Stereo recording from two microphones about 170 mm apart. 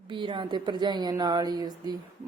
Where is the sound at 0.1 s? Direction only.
30° right (ahead or behind).